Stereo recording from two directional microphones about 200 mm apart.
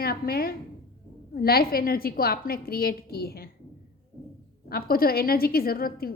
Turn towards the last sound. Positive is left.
turn(degrees=50)  # may be behind; listen again after turning